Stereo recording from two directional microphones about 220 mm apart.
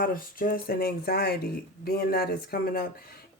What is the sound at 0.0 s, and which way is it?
Speech, 40° left (ahead or behind).